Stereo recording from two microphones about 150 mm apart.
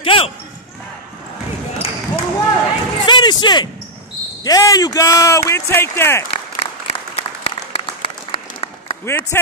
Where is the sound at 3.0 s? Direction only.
30° left (ahead or behind).